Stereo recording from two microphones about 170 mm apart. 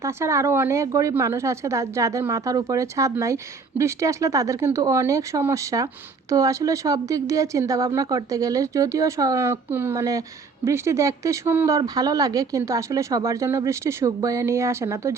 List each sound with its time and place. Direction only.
0.0 s speech: 15° right (ahead or behind)